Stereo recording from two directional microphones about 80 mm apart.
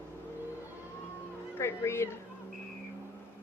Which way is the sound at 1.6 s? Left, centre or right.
Left.